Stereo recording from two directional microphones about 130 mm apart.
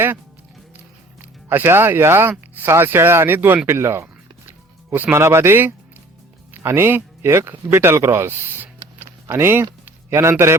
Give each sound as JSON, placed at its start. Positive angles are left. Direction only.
{"t": 1.2, "sound": "speech", "side_deg": -15}
{"t": 3.7, "sound": "music", "side_deg": -20}
{"t": 6.5, "sound": "speech", "side_deg": -20}